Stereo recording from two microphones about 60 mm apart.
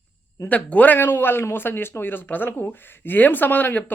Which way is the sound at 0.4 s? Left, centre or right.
Left.